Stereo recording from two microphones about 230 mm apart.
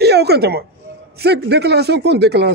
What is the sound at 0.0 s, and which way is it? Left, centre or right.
A woman's voice, right.